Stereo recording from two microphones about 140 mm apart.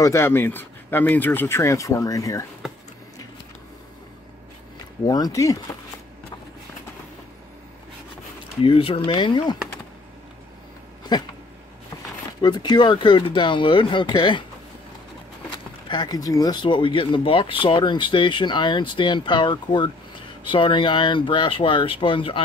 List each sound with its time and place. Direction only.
0.0 s speech: 20° left (ahead or behind)
5.0 s speech: 25° left (ahead or behind)
8.6 s speech: 40° left (ahead or behind)
11.1 s speech: 30° left (ahead or behind)
12.4 s speech: 30° left (ahead or behind)
15.9 s speech: 30° left (ahead or behind)